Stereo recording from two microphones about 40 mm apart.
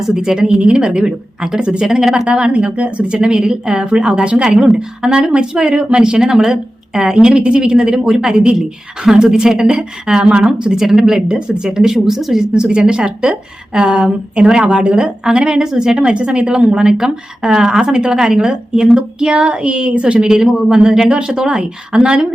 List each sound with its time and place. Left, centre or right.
0.2 s a woman's voice: centre
2.2 s a woman's voice: right
3.3 s a woman's voice: centre
10.8 s speech: centre
12.5 s a woman's voice: centre
20.2 s a woman's voice: centre